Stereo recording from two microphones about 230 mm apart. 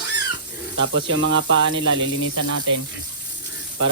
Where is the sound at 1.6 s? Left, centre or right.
Right.